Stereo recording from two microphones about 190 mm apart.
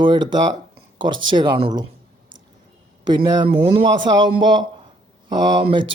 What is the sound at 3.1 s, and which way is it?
Speech, 20° right (ahead or behind).